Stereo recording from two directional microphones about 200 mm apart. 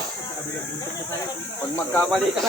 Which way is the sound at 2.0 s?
Centre (ahead or behind).